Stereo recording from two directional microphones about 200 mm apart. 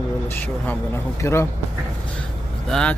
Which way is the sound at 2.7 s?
5° left (ahead or behind).